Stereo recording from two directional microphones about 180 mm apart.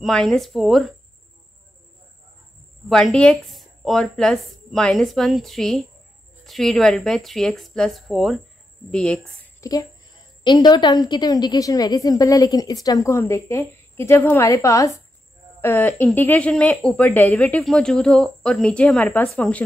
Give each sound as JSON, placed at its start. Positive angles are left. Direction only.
{"t": 0.0, "sound": "speech", "side_deg": 5}
{"t": 2.9, "sound": "speech", "side_deg": 0}
{"t": 9.6, "sound": "a woman's voice", "side_deg": 20}
{"t": 15.9, "sound": "speech", "side_deg": 0}